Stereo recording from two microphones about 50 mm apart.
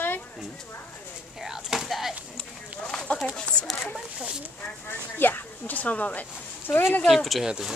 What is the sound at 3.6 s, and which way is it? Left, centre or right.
Speech, centre.